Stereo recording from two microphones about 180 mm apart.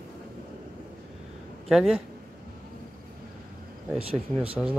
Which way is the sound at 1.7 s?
Centre (ahead or behind).